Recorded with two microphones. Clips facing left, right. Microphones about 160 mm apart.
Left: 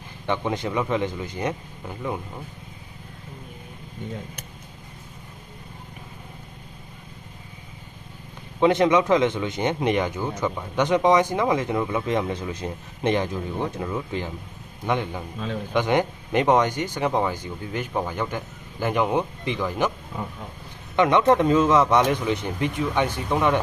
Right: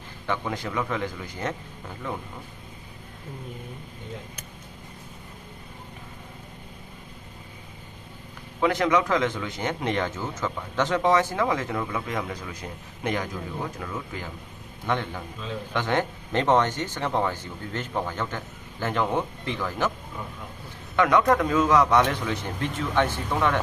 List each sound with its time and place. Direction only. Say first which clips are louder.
0.3 s speech: left 4 dB; 20° left (ahead or behind)
8.6 s speech: left 4 dB; 20° left (ahead or behind)
14.8 s speech: left 3 dB; 15° left (ahead or behind)
20.9 s speech: left 2 dB; 20° left (ahead or behind)